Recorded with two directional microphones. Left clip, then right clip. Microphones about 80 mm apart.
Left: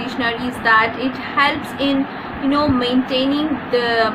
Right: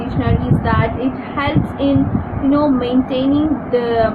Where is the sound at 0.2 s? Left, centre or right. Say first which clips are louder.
Right 1 dB; left.